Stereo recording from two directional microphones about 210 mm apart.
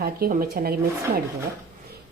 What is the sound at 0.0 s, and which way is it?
Speech, 45° right (ahead or behind).